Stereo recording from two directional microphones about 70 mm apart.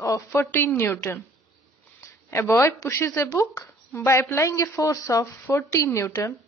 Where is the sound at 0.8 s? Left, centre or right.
Left.